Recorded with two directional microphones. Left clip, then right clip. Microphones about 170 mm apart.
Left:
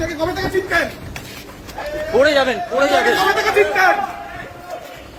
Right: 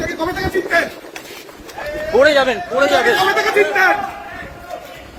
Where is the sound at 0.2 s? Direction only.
40° right (ahead or behind).